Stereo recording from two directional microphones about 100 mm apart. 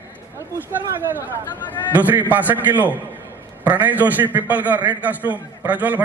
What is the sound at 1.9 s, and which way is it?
A man's voice, 20° right (ahead or behind).